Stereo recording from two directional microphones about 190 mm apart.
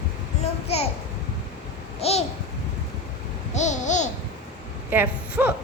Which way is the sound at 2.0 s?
35° left (ahead or behind).